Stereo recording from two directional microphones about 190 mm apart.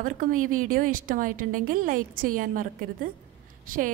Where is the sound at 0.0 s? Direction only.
45° right (ahead or behind).